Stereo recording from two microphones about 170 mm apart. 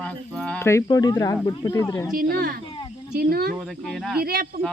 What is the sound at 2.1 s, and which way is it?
Speech, 65° right (ahead or behind).